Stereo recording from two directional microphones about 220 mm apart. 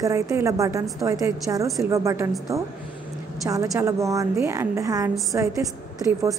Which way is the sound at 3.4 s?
15° right (ahead or behind).